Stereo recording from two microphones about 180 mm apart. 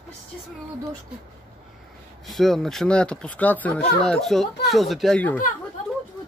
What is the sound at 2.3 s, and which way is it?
Speech, centre (ahead or behind).